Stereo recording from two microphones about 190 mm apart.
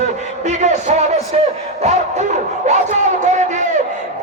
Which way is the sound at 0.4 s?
40° right (ahead or behind).